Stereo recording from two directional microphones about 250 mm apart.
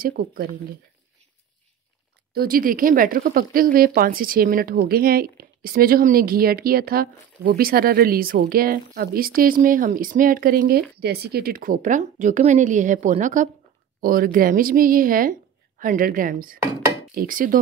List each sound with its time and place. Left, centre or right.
0.0 s speech: right
2.3 s speech: right